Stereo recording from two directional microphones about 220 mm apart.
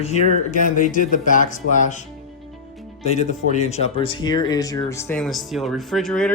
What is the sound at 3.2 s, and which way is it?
Speech, 30° left (ahead or behind).